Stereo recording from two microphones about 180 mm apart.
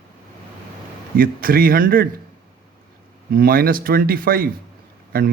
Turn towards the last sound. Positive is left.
turn(degrees=-55)  # may be behind; listen again after turning